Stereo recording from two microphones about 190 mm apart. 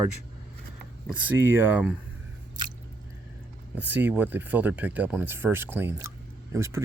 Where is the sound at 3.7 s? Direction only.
10° right (ahead or behind).